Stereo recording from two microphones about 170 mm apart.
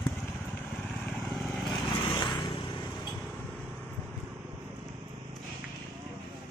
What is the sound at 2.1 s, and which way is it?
Vehicle, 25° left (ahead or behind).